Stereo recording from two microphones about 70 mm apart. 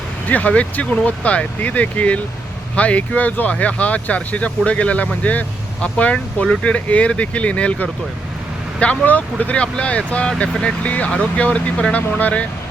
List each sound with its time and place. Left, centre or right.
0.3 s speech: left